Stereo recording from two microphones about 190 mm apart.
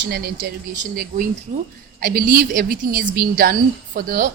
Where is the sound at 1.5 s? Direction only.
45° right (ahead or behind).